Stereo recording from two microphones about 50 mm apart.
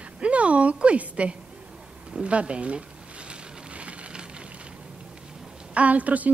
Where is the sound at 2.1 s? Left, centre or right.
Right.